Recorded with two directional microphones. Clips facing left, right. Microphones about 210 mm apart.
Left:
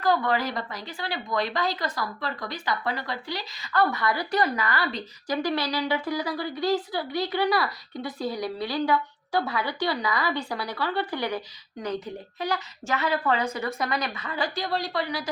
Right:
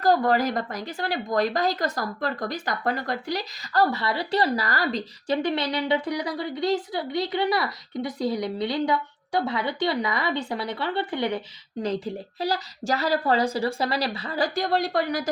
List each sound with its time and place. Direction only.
0.0 s speech: 40° right (ahead or behind)
5.4 s speech: 25° right (ahead or behind); by 15.3 s 45° right (ahead or behind)